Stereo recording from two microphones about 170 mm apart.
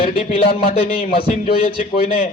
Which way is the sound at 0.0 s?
35° left (ahead or behind).